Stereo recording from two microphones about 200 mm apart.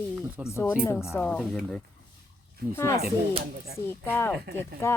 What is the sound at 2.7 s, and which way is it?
Speech, 15° left (ahead or behind).